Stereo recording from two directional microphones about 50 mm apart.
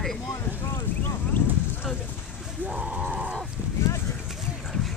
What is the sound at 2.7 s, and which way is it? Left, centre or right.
Livestock, right.